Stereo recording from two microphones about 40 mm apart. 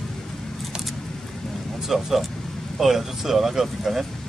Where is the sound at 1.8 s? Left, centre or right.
Centre.